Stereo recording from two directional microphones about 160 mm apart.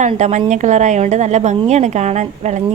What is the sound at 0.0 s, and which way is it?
A woman's voice, 45° right (ahead or behind).